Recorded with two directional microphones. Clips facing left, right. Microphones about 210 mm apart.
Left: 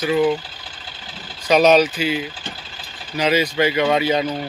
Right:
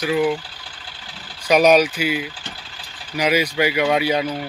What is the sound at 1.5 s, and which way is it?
Speech, 10° right (ahead or behind).